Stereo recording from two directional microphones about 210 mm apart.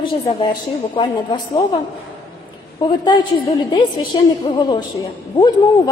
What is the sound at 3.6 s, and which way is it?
A woman's voice, 20° left (ahead or behind).